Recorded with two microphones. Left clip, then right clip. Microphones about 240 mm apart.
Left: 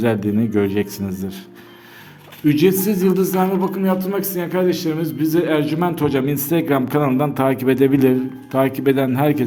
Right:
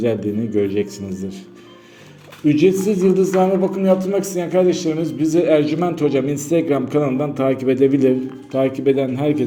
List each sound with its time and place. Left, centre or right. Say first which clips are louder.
0.0 s speech: left 1 dB; left
2.5 s speech: right 1 dB; left